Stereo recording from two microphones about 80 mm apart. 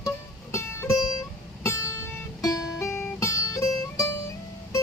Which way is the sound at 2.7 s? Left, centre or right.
Left.